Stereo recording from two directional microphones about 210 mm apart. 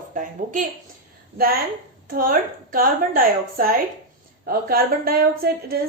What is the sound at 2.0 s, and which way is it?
A woman's voice, 40° right (ahead or behind).